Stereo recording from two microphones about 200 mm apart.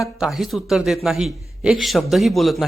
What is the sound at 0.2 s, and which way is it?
A woman's voice, centre (ahead or behind).